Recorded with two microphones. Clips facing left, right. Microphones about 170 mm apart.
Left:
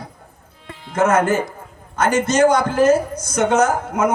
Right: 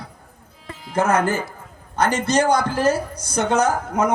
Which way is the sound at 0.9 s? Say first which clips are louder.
Left 3 dB; 35° right (ahead or behind).